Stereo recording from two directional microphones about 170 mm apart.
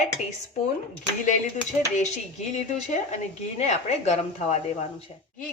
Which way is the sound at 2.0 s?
45° left (ahead or behind).